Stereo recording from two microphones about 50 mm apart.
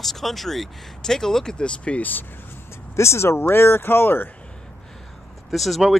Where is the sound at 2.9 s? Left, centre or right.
Left.